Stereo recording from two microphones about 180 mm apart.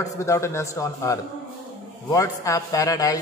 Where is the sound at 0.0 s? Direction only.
15° left (ahead or behind).